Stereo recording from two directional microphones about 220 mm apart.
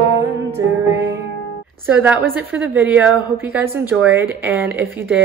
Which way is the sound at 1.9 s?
5° right (ahead or behind).